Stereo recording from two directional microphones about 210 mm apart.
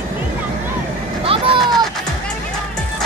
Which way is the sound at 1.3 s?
25° right (ahead or behind).